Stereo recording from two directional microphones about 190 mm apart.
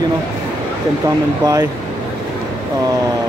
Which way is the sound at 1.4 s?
20° right (ahead or behind).